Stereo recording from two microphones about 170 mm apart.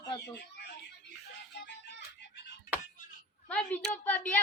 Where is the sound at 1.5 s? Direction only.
85° left.